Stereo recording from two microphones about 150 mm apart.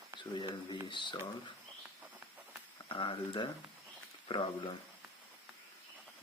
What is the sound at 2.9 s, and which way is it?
Speech, 35° left (ahead or behind).